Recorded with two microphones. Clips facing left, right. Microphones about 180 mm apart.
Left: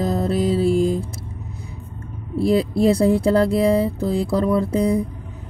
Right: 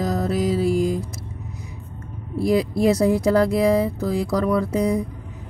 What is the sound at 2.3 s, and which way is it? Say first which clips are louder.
Speech: left 2 dB; 30° left (ahead or behind).